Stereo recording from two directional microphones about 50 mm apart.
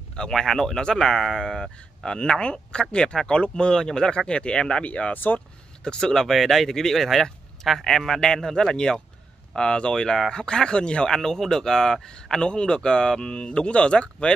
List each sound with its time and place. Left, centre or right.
0.3 s speech: centre; by 5.2 s left
5.9 s speech: centre
11.1 s speech: centre